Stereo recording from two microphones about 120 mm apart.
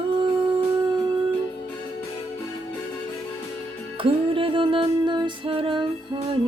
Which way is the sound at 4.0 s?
45° right (ahead or behind).